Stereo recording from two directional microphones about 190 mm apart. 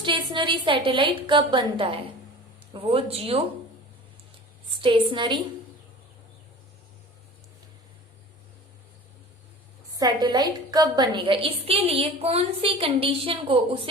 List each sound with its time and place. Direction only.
0.0 s a woman's voice: 25° right (ahead or behind)
4.8 s a woman's voice: 25° right (ahead or behind)
10.0 s a woman's voice: 20° right (ahead or behind)